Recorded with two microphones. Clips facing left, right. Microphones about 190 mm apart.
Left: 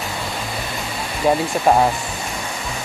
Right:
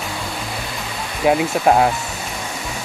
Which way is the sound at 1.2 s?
5° right (ahead or behind).